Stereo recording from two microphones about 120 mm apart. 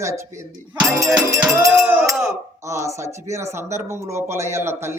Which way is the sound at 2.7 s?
25° right (ahead or behind).